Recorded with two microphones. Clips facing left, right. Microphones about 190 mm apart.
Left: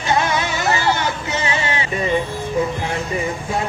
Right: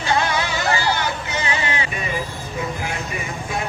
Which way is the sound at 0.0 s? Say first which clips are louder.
Left 2 dB; 20° left (ahead or behind).